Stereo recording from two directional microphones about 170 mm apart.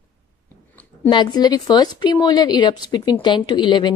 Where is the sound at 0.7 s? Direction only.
10° left (ahead or behind).